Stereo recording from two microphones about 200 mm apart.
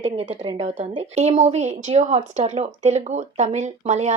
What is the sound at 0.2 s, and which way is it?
A woman's voice, 30° right (ahead or behind).